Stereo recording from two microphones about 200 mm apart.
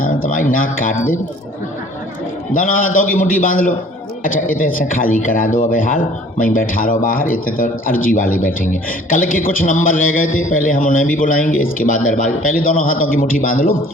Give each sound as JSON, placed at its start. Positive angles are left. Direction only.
{"t": 0.0, "sound": "speech", "side_deg": 45}
{"t": 2.6, "sound": "a man's voice", "side_deg": 40}